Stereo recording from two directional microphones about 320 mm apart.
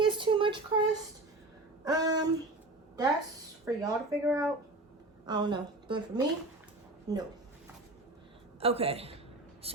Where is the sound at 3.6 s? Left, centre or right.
Centre.